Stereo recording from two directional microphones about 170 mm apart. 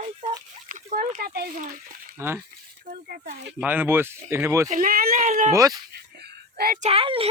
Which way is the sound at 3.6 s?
10° right (ahead or behind).